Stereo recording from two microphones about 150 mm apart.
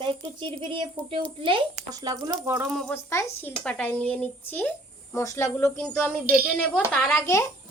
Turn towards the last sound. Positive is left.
turn(degrees=15)  # may be behind; listen again after turning